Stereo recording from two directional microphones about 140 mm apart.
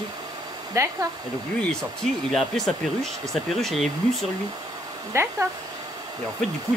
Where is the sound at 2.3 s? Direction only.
Centre (ahead or behind).